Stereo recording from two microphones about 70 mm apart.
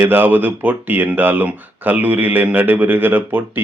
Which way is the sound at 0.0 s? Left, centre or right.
Right.